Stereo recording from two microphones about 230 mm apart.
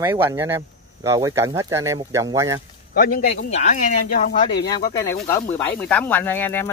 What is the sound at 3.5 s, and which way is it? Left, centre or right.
Speech, left.